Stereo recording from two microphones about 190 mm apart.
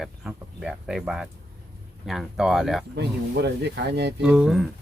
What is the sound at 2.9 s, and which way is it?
Speech, 65° right (ahead or behind).